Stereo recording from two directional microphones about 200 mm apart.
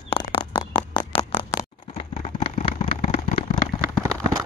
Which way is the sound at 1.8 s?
40° left (ahead or behind).